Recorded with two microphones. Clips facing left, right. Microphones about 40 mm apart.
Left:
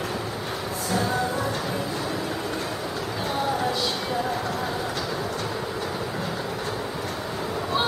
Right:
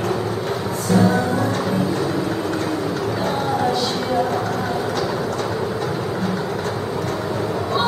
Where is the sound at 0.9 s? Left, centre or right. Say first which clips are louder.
Right 9 dB; centre.